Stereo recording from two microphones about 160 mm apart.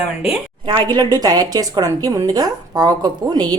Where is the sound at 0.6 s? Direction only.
25° right (ahead or behind).